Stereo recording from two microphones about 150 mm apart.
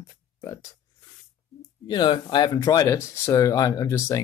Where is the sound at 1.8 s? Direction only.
30° left (ahead or behind).